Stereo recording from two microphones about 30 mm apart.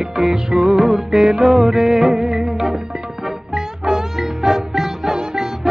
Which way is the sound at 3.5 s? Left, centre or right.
Centre.